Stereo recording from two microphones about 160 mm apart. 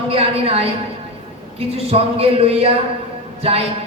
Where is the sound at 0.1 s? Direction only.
40° right (ahead or behind).